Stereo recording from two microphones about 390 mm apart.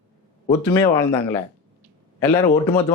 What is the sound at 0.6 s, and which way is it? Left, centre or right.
Speech, centre.